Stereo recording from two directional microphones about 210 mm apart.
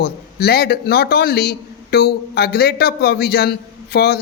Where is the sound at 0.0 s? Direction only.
50° left (ahead or behind).